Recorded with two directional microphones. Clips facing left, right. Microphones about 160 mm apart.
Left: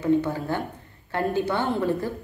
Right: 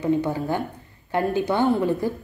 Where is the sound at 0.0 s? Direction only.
15° right (ahead or behind).